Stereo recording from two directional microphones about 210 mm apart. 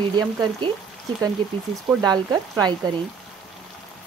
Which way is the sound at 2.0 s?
20° right (ahead or behind).